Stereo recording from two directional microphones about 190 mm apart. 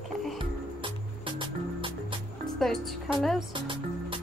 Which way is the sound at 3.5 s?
25° right (ahead or behind).